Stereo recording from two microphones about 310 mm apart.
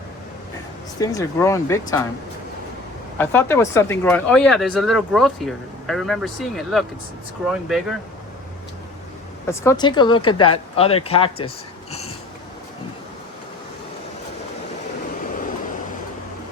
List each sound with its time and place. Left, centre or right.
0.9 s speech: centre
3.2 s speech: centre
9.5 s speech: centre